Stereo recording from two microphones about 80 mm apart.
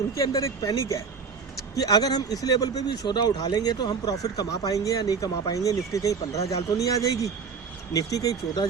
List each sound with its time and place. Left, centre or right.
0.2 s speech: left